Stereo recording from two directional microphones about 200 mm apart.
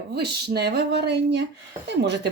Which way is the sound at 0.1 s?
55° right (ahead or behind).